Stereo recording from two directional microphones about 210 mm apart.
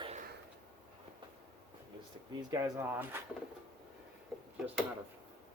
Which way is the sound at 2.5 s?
15° right (ahead or behind).